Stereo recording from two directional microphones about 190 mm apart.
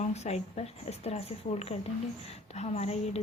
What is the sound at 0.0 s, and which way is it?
A woman's voice, 35° left (ahead or behind).